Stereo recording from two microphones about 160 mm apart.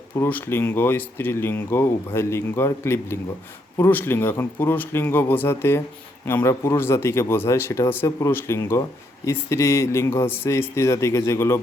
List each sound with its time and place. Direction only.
0.2 s speech: 10° left (ahead or behind)